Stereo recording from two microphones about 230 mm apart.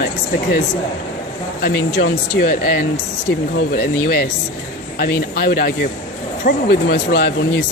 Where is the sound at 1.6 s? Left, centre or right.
Left.